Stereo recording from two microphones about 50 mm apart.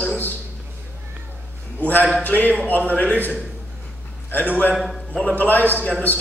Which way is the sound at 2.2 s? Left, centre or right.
Left.